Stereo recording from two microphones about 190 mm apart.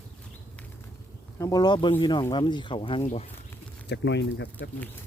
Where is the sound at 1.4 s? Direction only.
20° left (ahead or behind).